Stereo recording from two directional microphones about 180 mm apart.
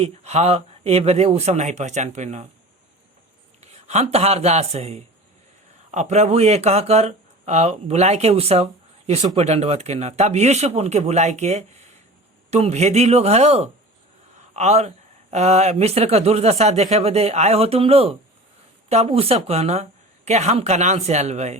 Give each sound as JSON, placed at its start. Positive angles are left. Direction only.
{"t": 0.0, "sound": "speech", "side_deg": -35}
{"t": 3.6, "sound": "speech", "side_deg": -35}